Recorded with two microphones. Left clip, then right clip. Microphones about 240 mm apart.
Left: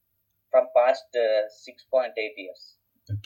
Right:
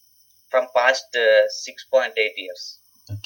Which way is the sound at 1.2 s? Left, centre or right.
Centre.